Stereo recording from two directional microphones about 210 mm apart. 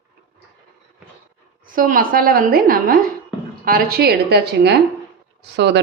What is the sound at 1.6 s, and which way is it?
A woman's voice, 40° right (ahead or behind).